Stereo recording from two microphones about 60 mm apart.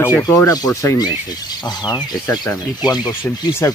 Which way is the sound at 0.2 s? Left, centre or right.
Left.